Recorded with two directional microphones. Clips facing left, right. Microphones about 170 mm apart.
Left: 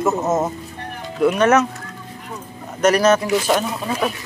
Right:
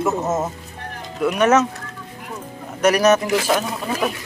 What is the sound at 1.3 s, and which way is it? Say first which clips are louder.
Speech: right 1 dB; 15° right (ahead or behind).